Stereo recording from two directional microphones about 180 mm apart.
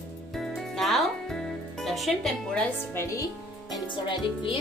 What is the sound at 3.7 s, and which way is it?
Music, 25° left (ahead or behind).